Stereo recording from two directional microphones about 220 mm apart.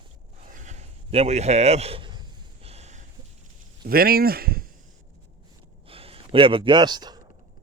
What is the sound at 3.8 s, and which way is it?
Speech, 45° right (ahead or behind).